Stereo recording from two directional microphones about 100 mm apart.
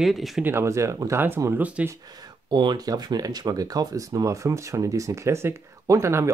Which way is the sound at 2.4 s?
50° right (ahead or behind).